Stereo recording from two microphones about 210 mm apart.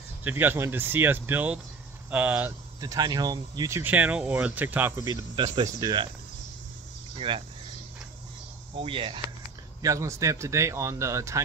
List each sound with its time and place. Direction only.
0.2 s speech: 10° right (ahead or behind)
7.2 s speech: 25° right (ahead or behind)
8.7 s speech: 25° right (ahead or behind)
9.8 s speech: 15° right (ahead or behind)